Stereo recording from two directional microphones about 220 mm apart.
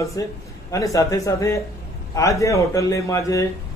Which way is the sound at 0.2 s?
15° left (ahead or behind).